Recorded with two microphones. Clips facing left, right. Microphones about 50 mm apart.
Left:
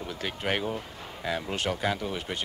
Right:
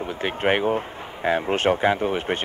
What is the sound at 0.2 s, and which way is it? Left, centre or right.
Speech, right.